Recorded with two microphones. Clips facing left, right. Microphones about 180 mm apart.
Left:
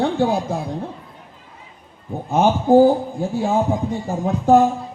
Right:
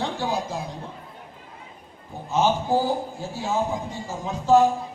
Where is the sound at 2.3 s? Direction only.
55° left (ahead or behind).